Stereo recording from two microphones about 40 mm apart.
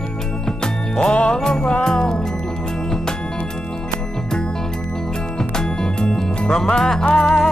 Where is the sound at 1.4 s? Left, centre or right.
Centre.